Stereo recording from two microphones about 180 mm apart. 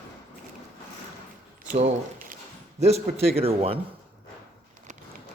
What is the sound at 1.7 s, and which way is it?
Squish, 45° right (ahead or behind).